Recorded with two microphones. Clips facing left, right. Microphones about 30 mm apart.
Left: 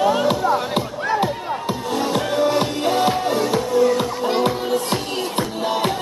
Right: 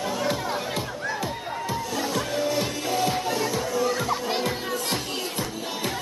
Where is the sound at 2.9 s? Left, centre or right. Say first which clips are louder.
Left 7 dB; left.